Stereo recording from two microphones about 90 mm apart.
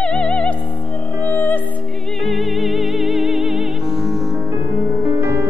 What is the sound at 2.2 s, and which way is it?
Music, centre (ahead or behind).